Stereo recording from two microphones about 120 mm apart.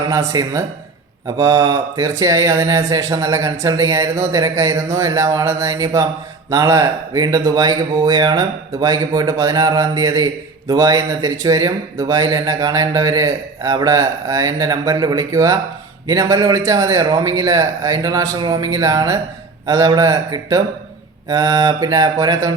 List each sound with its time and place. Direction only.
0.1 s a man's voice: 30° right (ahead or behind)